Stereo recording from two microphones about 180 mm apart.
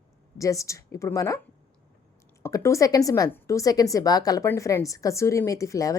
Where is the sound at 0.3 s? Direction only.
20° left (ahead or behind).